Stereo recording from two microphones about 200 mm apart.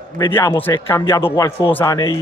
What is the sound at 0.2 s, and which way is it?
A man's voice, 10° left (ahead or behind).